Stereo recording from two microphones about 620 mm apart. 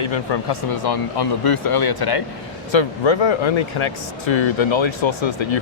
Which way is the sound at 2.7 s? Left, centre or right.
Left.